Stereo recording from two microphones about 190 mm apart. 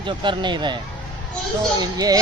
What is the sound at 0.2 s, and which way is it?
Speech, 25° right (ahead or behind).